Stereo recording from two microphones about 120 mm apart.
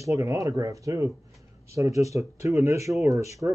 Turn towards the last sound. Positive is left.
turn(degrees=-25)  # may be behind; listen again after turning